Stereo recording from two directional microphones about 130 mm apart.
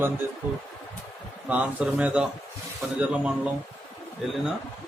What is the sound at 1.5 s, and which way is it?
Speech, 10° right (ahead or behind).